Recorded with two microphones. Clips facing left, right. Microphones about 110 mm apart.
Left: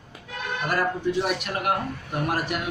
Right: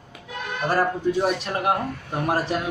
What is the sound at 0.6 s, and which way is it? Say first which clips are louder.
A man's voice: right 3 dB; 35° right (ahead or behind).